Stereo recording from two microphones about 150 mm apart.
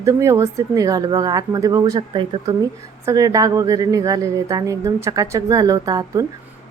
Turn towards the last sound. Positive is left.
turn(degrees=-25)  # may be behind; listen again after turning